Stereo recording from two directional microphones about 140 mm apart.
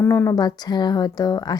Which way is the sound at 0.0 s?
20° left (ahead or behind).